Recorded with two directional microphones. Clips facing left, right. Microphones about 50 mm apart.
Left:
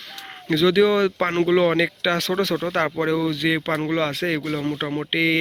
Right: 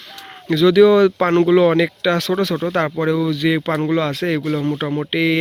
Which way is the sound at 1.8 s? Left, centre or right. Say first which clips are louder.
Right 4 dB; left.